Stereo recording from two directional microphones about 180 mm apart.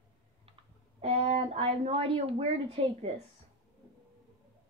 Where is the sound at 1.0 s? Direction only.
35° right (ahead or behind).